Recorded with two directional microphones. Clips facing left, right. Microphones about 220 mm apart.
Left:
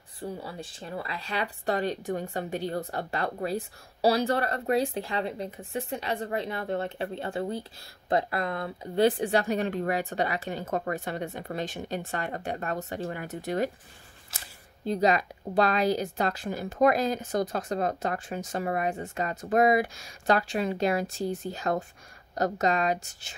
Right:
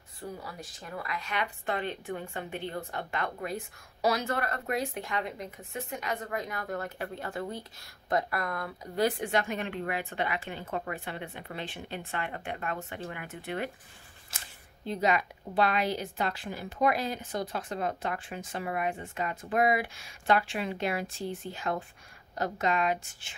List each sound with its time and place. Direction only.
0.2 s speech: 30° left (ahead or behind)
14.9 s speech: 35° left (ahead or behind)